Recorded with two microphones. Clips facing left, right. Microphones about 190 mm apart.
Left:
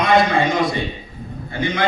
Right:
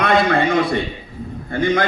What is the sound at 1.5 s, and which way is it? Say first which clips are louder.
Speech: right 5 dB; 50° right (ahead or behind).